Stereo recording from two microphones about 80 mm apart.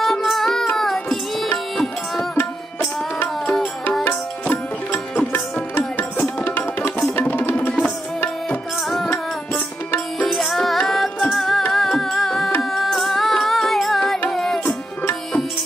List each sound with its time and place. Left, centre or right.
0.0 s music: centre
0.7 s child singing: centre
2.8 s music: centre
4.0 s tabla: left
7.2 s music: left
10.2 s music: centre